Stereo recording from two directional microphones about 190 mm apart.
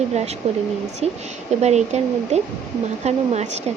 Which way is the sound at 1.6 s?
35° right (ahead or behind).